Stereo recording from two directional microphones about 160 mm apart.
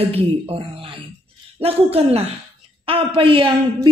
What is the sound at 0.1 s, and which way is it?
A woman's voice, 35° right (ahead or behind).